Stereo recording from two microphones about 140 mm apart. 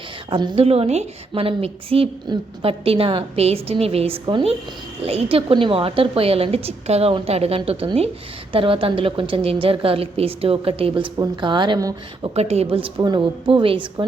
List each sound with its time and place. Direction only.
0.3 s a woman's voice: 35° right (ahead or behind)
0.6 s a woman's voice: 45° right (ahead or behind); by 11.9 s 30° right (ahead or behind)
12.2 s a woman's voice: 45° right (ahead or behind)